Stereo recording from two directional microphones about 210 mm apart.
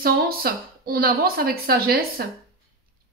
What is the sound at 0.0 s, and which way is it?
Speech, 45° right (ahead or behind).